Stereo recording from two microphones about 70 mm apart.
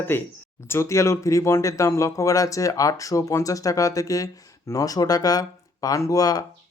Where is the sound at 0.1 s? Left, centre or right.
Left.